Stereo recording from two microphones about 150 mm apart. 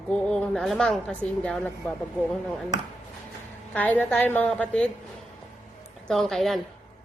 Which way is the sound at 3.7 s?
10° left (ahead or behind).